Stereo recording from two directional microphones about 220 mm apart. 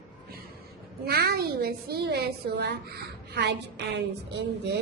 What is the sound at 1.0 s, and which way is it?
A woman's voice, 45° right (ahead or behind).